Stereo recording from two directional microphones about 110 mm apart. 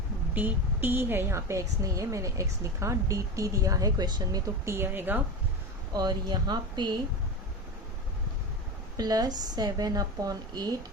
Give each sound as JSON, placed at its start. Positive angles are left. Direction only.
{"t": 0.3, "sound": "a woman's voice", "side_deg": -15}
{"t": 5.9, "sound": "a woman's voice", "side_deg": -40}
{"t": 9.0, "sound": "a woman's voice", "side_deg": -35}